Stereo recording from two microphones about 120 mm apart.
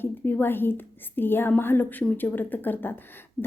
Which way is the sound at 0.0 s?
15° left (ahead or behind).